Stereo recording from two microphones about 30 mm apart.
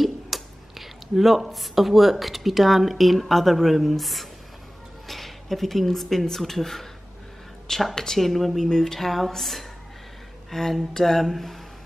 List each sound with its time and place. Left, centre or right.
0.0 s speech: centre
7.9 s speech: centre
8.2 s speech: centre
8.6 s speech: centre